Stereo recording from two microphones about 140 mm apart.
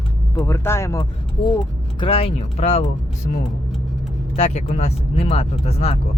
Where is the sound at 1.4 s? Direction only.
40° left (ahead or behind).